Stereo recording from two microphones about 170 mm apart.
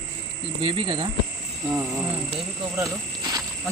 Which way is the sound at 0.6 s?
30° right (ahead or behind).